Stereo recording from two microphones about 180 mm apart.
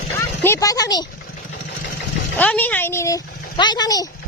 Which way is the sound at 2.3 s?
10° left (ahead or behind).